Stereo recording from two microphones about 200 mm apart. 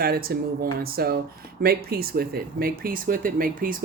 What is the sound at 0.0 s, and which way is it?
Speech, 50° right (ahead or behind).